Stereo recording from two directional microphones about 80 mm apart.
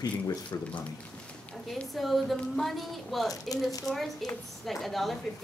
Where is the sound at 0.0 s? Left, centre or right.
Left.